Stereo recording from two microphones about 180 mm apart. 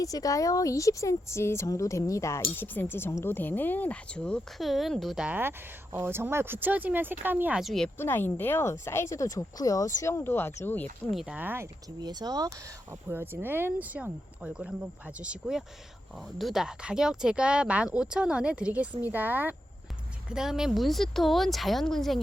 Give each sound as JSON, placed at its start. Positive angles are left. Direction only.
{"t": 0.0, "sound": "speech", "side_deg": 20}
{"t": 7.9, "sound": "speech", "side_deg": 10}
{"t": 11.1, "sound": "speech", "side_deg": -5}